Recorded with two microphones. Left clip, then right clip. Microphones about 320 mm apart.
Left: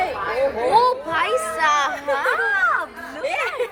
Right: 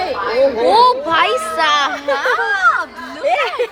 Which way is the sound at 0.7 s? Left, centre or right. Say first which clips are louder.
Right 4 dB; centre.